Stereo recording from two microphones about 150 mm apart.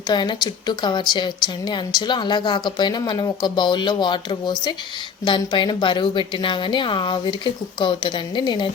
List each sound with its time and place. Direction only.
0.1 s a woman's voice: 30° left (ahead or behind)